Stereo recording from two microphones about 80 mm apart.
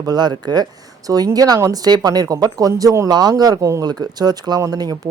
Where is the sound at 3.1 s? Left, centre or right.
Right.